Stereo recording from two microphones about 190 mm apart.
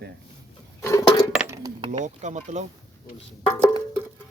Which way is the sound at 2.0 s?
40° right (ahead or behind).